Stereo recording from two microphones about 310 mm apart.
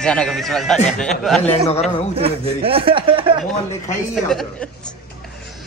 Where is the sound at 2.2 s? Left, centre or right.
Centre.